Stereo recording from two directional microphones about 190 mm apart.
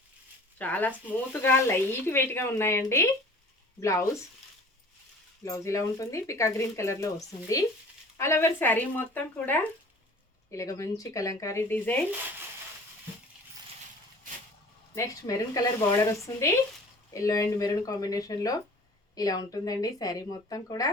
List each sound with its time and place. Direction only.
0.6 s speech: 10° left (ahead or behind)
5.5 s speech: 15° left (ahead or behind)
8.2 s speech: 15° left (ahead or behind)
14.9 s speech: 15° left (ahead or behind)